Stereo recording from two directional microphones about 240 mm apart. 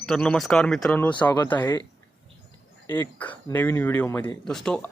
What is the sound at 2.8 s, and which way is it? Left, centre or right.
Speech, centre.